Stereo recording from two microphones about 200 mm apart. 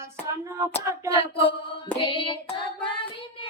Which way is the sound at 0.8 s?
15° right (ahead or behind).